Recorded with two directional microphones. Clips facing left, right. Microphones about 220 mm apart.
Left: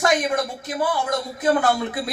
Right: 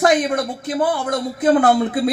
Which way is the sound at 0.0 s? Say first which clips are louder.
Right 4 dB; 55° right (ahead or behind).